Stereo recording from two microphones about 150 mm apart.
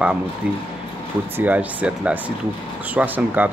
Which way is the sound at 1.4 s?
10° right (ahead or behind).